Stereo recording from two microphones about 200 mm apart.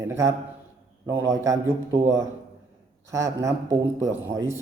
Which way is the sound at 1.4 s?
15° right (ahead or behind).